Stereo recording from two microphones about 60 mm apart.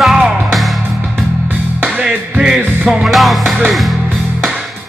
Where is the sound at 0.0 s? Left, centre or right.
Centre.